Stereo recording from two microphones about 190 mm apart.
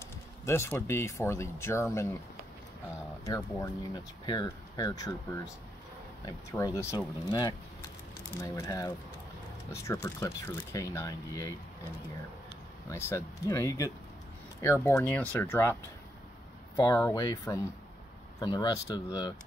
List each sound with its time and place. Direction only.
0.5 s speech: 10° left (ahead or behind)
3.3 s speech: 15° left (ahead or behind)
6.2 s speech: 20° left (ahead or behind)
12.9 s speech: 15° left (ahead or behind)